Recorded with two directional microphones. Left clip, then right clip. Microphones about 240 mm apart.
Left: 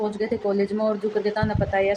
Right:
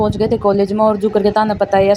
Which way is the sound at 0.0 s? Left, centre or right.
Right.